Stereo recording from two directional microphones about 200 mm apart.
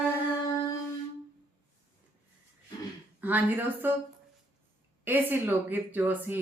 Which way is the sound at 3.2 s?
10° right (ahead or behind).